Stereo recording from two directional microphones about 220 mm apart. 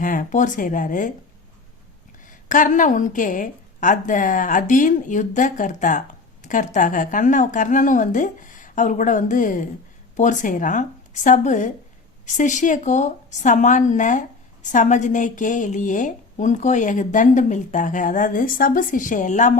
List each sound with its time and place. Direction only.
0.0 s a woman's voice: 35° left (ahead or behind)
2.5 s a woman's voice: 35° left (ahead or behind)